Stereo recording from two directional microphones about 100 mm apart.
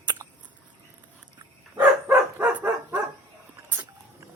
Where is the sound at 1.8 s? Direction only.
20° right (ahead or behind).